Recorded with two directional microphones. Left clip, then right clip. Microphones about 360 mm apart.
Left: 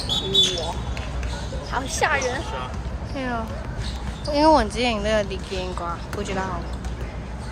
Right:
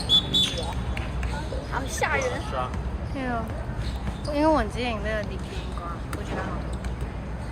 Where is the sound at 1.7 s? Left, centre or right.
Left.